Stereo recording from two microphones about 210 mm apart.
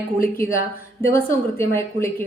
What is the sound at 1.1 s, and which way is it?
Speech, 10° left (ahead or behind).